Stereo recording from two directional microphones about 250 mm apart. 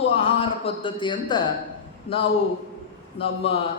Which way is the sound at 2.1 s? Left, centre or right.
Left.